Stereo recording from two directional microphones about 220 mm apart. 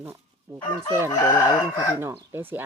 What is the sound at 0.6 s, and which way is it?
Chicken, 15° left (ahead or behind).